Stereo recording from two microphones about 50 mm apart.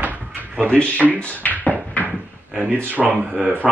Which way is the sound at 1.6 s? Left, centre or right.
Left.